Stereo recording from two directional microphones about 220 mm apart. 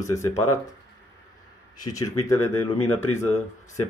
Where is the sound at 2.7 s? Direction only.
75° left (ahead or behind).